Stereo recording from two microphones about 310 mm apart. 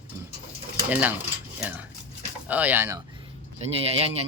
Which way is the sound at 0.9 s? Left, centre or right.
Centre.